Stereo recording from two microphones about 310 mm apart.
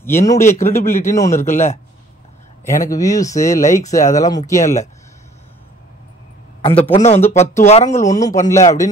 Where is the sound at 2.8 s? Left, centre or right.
Centre.